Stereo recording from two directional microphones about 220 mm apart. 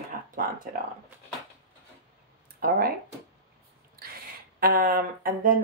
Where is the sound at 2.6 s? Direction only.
40° right (ahead or behind).